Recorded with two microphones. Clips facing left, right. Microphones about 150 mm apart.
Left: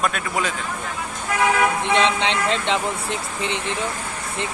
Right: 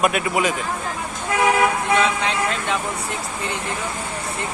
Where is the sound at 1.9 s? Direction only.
25° left (ahead or behind).